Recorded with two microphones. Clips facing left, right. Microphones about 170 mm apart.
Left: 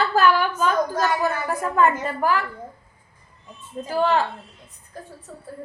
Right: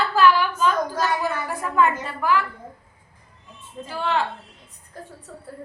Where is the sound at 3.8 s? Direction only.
40° left (ahead or behind).